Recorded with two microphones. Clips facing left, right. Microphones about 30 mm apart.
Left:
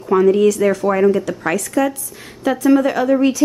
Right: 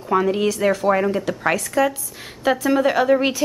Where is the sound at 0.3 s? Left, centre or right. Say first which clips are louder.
Left 6 dB; centre.